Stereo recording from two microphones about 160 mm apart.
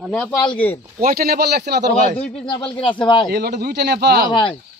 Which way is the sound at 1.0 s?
70° right (ahead or behind).